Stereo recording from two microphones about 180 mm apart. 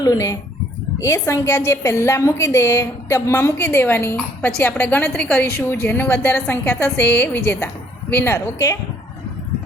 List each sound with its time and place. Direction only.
0.0 s a woman's voice: 20° left (ahead or behind)